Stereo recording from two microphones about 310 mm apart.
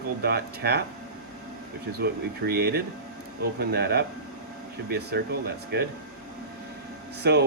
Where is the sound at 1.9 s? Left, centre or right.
Right.